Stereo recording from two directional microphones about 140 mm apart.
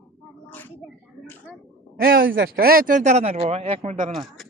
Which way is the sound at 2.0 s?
90° right.